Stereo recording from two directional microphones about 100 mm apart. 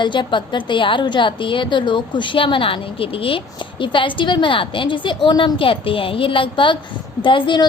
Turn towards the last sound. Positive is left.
turn(degrees=55)  # may be behind; listen again after turning